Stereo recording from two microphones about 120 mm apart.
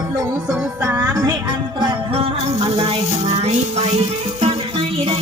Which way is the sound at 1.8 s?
50° right (ahead or behind).